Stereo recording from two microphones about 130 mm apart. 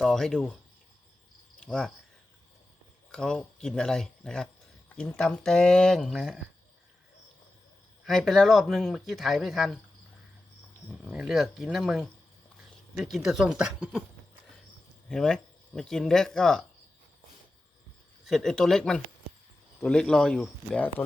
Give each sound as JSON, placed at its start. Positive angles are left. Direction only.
{"t": 0.0, "sound": "speech", "side_deg": 0}
{"t": 1.6, "sound": "speech", "side_deg": 5}
{"t": 3.1, "sound": "speech", "side_deg": 5}
{"t": 8.0, "sound": "speech", "side_deg": 0}
{"t": 10.8, "sound": "speech", "side_deg": -5}
{"t": 15.1, "sound": "speech", "side_deg": 5}
{"t": 18.3, "sound": "speech", "side_deg": 0}